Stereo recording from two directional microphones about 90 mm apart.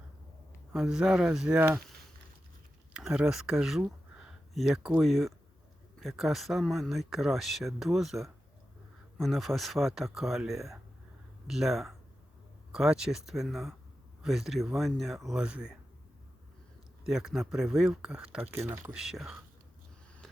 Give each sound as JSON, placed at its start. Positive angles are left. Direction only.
{"t": 0.7, "sound": "speech", "side_deg": -5}
{"t": 2.9, "sound": "speech", "side_deg": -10}
{"t": 15.3, "sound": "speech", "side_deg": -10}
{"t": 17.0, "sound": "speech", "side_deg": -5}
{"t": 18.5, "sound": "speech", "side_deg": -30}
{"t": 18.9, "sound": "speech", "side_deg": -5}